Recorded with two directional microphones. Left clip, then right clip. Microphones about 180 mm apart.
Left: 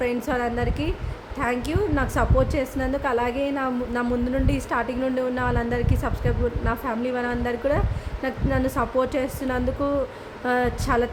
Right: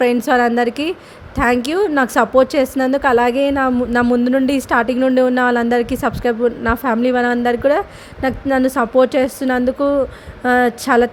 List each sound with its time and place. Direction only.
0.0 s a woman's voice: 45° right (ahead or behind)